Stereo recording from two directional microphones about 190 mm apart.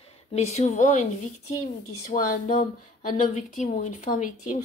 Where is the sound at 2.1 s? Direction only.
45° left (ahead or behind).